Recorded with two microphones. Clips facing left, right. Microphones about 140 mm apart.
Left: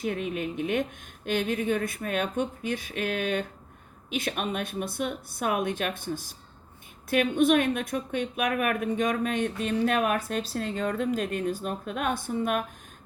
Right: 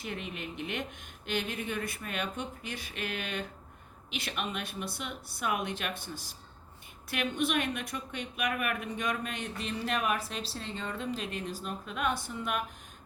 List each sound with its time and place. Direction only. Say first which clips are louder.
0.0 s a woman's voice: left 9 dB; 50° left (ahead or behind)